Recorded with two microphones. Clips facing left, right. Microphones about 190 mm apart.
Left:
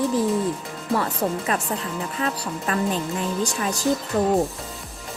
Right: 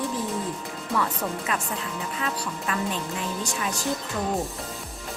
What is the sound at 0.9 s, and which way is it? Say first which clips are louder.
Speech: left 4 dB; 40° left (ahead or behind).